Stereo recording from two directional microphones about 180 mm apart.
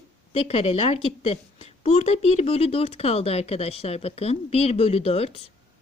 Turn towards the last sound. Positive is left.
turn(degrees=35)  # may be behind; listen again after turning